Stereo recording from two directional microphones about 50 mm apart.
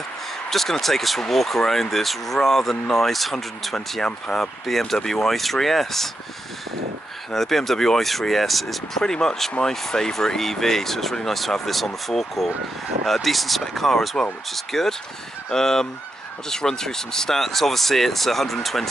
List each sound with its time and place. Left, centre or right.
0.5 s speech: centre
7.3 s speech: centre